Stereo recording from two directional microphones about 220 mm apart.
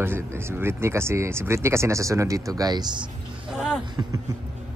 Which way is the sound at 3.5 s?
Centre (ahead or behind).